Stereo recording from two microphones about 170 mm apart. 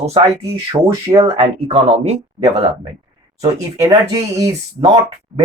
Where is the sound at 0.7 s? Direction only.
30° right (ahead or behind).